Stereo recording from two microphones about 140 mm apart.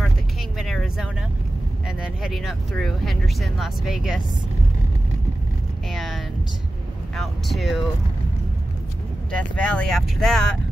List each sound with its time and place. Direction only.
0.6 s vehicle: centre (ahead or behind)
1.9 s speech: 5° right (ahead or behind)
5.9 s a sound: centre (ahead or behind)
7.2 s speech: centre (ahead or behind)
9.6 s speech: 10° left (ahead or behind)